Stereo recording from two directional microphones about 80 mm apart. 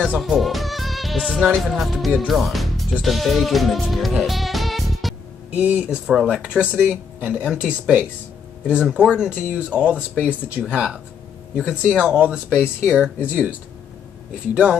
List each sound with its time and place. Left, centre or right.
0.2 s music: centre
1.5 s speech: centre
4.2 s music: centre
5.5 s speech: right
6.0 s speech: centre
14.5 s speech: centre